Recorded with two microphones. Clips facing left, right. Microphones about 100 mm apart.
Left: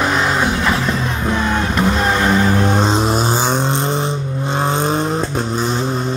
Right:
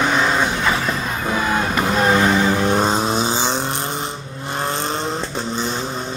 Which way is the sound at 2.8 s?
5° right (ahead or behind).